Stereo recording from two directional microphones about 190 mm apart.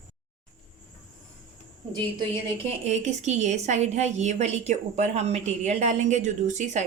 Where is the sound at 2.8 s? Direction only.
35° right (ahead or behind).